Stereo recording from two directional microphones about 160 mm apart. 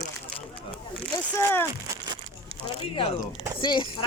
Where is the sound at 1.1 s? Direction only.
15° left (ahead or behind).